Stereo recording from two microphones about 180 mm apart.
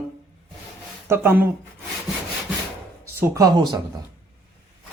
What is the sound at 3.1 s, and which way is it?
Speech, 15° right (ahead or behind).